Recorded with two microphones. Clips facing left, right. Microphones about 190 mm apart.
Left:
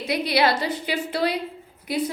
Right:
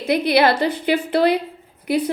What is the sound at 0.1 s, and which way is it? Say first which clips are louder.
A woman's voice: right 5 dB; 55° right (ahead or behind).